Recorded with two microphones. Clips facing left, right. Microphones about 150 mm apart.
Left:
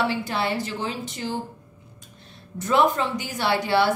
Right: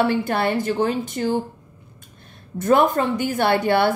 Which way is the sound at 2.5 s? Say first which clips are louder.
Right 4 dB; 50° right (ahead or behind).